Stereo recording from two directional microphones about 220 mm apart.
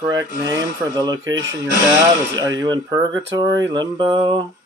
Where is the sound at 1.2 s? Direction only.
60° right (ahead or behind).